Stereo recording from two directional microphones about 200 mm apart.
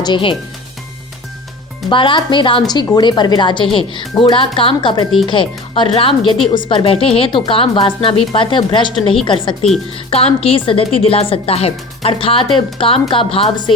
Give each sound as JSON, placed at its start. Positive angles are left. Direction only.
{"t": 0.0, "sound": "speech", "side_deg": 25}
{"t": 1.9, "sound": "speech", "side_deg": 25}